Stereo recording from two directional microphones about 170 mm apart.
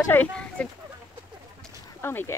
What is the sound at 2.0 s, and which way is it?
Speech, 15° left (ahead or behind).